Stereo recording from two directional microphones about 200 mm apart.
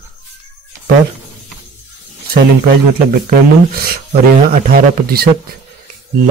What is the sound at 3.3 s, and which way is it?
Speech, 50° right (ahead or behind).